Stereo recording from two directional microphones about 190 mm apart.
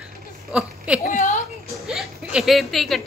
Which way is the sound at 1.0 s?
40° left (ahead or behind).